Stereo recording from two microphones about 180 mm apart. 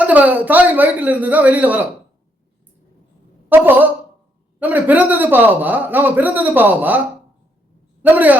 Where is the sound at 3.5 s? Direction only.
10° right (ahead or behind).